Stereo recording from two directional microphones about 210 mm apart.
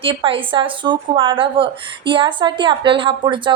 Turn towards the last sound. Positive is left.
turn(degrees=-25)  # may be behind; listen again after turning